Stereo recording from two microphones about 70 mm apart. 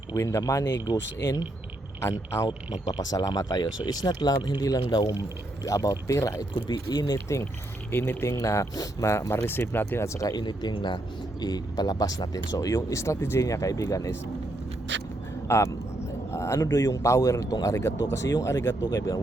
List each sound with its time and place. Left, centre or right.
0.2 s speech: left
2.0 s a man's voice: left
2.8 s a man's voice: left
6.7 s speech: left
7.9 s speech: left
10.1 s a man's voice: left
10.3 s speech: left
11.3 s speech: left
15.4 s a man's voice: left
17.7 s a man's voice: left
18.8 s speech: left